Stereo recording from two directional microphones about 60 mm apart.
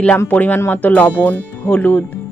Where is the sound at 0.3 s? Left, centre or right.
Left.